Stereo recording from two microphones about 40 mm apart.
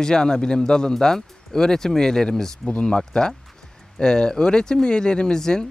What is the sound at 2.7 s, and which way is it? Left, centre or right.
Speech, left.